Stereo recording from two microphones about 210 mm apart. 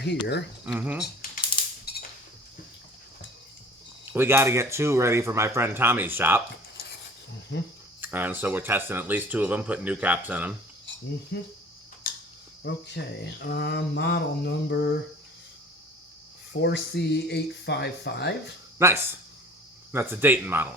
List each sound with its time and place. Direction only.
0.6 s speech: 5° right (ahead or behind)
1.8 s a sound: 50° left (ahead or behind)
4.1 s speech: 10° right (ahead or behind)
8.0 s speech: 10° right (ahead or behind)
11.3 s mantra: 50° left (ahead or behind)
12.1 s a sound: 45° left (ahead or behind)
12.6 s mantra: 55° left (ahead or behind)
16.5 s mantra: 50° left (ahead or behind)
18.8 s speech: 10° right (ahead or behind)